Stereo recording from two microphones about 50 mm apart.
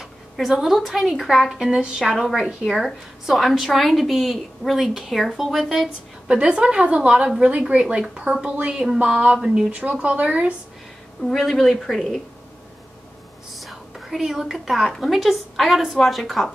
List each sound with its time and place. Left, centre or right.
0.0 s a woman's voice: centre
5.9 s a woman's voice: centre
11.2 s a woman's voice: centre
13.6 s whispering: centre
15.0 s a woman's voice: centre